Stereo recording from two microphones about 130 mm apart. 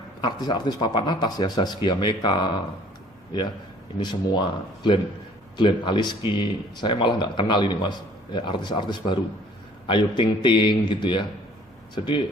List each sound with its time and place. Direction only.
0.2 s speech: 35° left (ahead or behind)
3.9 s speech: 35° left (ahead or behind)